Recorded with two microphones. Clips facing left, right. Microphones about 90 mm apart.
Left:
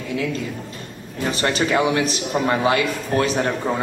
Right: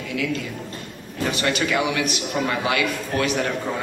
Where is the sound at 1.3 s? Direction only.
35° left (ahead or behind).